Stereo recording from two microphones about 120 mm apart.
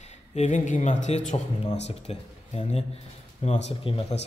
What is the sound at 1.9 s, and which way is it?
Speech, 60° left (ahead or behind).